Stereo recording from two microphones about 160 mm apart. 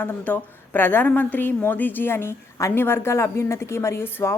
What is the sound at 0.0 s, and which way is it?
A woman's voice, 10° left (ahead or behind).